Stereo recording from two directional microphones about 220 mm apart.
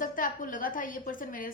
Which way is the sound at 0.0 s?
35° left (ahead or behind).